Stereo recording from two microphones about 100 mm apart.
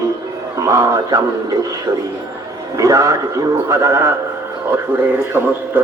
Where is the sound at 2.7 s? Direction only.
35° right (ahead or behind).